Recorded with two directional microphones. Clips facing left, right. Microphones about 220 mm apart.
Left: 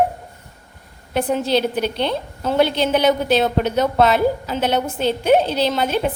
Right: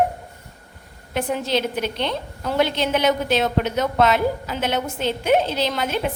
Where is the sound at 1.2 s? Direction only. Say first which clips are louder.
Left 4 dB; 35° left (ahead or behind).